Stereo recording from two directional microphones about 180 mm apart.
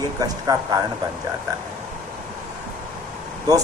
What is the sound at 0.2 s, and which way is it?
Speech, 20° right (ahead or behind).